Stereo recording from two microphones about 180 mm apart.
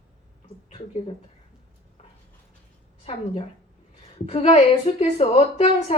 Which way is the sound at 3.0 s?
35° left (ahead or behind).